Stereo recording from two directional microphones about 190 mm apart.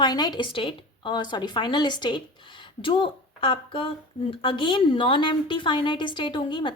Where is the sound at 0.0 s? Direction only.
20° left (ahead or behind).